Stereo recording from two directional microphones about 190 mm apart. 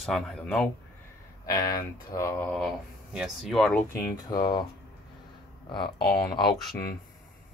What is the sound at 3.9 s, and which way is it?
Speech, 20° left (ahead or behind).